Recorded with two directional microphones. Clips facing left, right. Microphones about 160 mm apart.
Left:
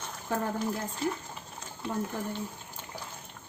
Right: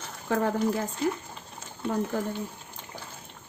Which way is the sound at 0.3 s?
90° right.